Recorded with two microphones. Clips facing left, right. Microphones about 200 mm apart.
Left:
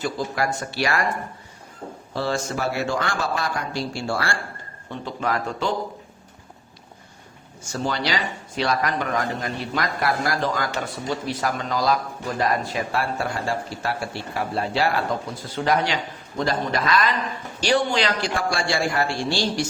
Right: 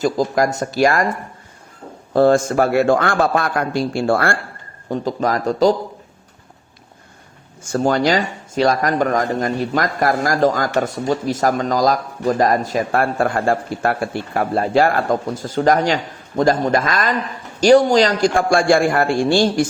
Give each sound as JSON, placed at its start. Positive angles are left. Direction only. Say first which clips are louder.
{"t": 0.0, "sound": "speech", "louder": "right 8 dB", "side_deg": -40}
{"t": 2.1, "sound": "speech", "louder": "right 12 dB", "side_deg": -50}
{"t": 4.9, "sound": "speech", "louder": "right 7 dB", "side_deg": -40}
{"t": 7.6, "sound": "speech", "louder": "right 9 dB", "side_deg": -50}